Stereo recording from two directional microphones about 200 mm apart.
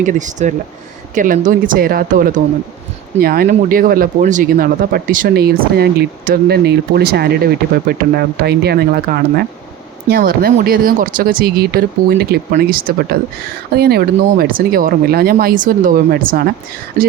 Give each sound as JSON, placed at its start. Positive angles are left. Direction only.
{"t": 0.0, "sound": "speech", "side_deg": -40}